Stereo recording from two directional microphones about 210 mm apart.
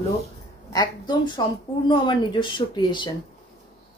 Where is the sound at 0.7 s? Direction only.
20° left (ahead or behind).